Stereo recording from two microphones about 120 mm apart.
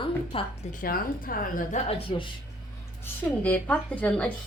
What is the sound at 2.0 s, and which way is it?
Speech, 45° left (ahead or behind).